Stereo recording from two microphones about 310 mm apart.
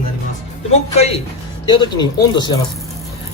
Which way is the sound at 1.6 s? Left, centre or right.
Centre.